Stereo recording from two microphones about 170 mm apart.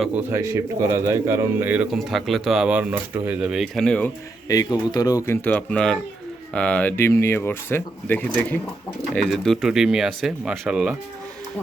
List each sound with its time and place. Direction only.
0.0 s speech: 10° right (ahead or behind)
4.4 s speech: 20° left (ahead or behind); by 10.9 s 5° right (ahead or behind)